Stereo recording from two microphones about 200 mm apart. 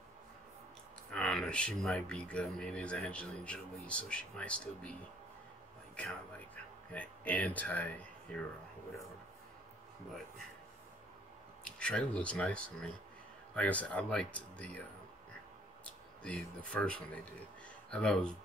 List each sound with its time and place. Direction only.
1.1 s speech: 5° left (ahead or behind)
5.9 s speech: 5° left (ahead or behind)
11.6 s speech: 5° left (ahead or behind)